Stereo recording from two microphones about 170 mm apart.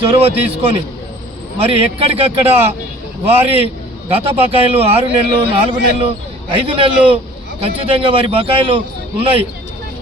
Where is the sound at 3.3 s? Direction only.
35° right (ahead or behind).